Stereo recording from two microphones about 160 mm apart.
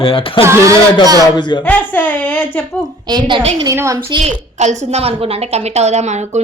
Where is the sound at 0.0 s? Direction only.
35° left (ahead or behind).